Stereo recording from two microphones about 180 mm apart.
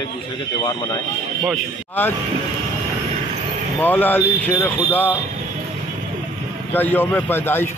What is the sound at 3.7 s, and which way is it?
A man's voice, 10° left (ahead or behind).